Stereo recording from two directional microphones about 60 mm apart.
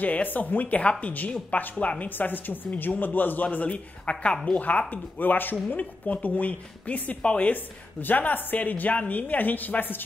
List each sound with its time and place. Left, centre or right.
0.0 s speech: left